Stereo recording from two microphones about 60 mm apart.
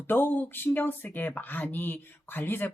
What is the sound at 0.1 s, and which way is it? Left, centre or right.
Speech, left.